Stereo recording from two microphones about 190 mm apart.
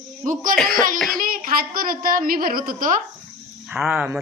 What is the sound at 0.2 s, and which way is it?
A woman's voice, 45° right (ahead or behind).